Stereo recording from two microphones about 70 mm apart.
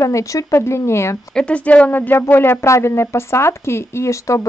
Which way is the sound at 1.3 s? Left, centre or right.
Centre.